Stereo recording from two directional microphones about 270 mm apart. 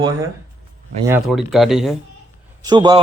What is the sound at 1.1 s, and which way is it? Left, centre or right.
Speech, centre.